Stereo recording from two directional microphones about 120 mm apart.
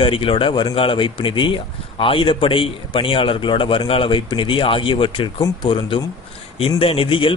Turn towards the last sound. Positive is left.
turn(degrees=50)  # may be behind; listen again after turning